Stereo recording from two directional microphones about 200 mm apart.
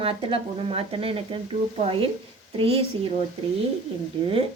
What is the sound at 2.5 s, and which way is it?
Speech, 30° right (ahead or behind).